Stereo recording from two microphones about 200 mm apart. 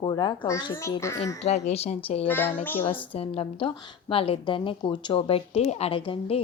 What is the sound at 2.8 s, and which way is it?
A woman's voice, 25° left (ahead or behind).